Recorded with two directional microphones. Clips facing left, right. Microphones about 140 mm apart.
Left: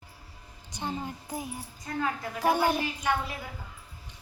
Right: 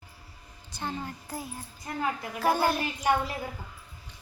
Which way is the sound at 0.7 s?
15° left (ahead or behind).